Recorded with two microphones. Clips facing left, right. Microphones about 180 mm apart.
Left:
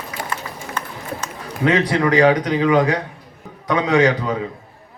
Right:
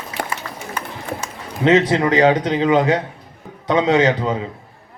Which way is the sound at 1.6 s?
25° right (ahead or behind).